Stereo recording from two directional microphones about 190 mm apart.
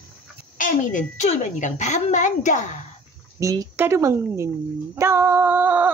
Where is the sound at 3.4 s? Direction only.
15° right (ahead or behind).